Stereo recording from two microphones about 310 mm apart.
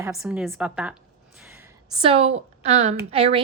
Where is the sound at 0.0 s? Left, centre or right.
Centre.